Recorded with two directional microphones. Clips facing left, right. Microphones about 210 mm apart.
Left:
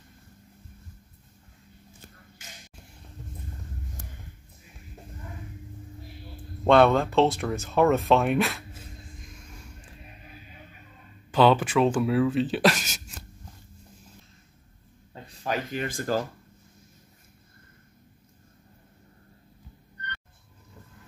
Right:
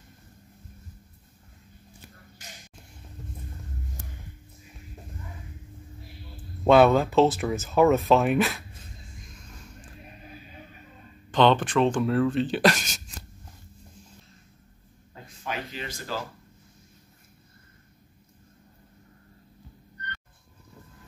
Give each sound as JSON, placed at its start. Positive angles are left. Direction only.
{"t": 6.6, "sound": "speech", "side_deg": -5}
{"t": 11.3, "sound": "speech", "side_deg": 5}
{"t": 15.2, "sound": "speech", "side_deg": 40}